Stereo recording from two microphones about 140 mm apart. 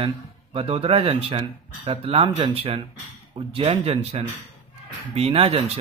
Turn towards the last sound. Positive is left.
turn(degrees=-45)  # may be behind; listen again after turning